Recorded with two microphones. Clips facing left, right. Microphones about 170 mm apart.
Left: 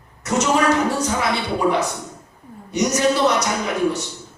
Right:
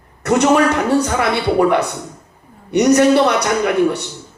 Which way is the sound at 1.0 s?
60° right (ahead or behind).